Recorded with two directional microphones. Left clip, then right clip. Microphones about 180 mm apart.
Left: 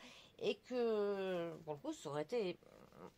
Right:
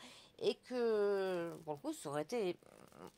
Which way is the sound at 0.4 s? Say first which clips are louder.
Right 2 dB; 45° right (ahead or behind).